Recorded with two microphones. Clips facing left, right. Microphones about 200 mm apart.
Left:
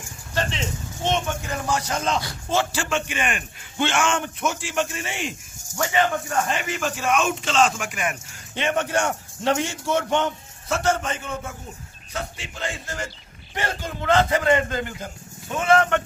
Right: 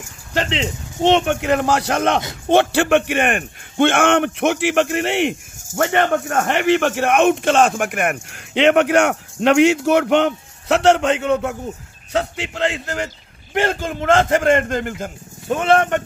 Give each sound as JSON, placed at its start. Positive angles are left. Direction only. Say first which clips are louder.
{"t": 0.5, "sound": "a man's voice", "louder": "right 6 dB", "side_deg": -75}